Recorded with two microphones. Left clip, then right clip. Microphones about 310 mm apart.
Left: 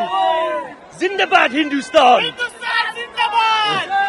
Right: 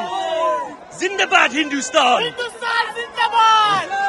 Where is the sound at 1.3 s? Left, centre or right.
Centre.